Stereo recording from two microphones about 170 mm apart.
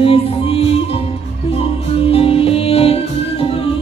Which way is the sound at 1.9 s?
35° left (ahead or behind).